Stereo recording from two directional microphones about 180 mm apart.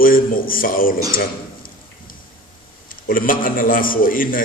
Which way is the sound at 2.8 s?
50° left (ahead or behind).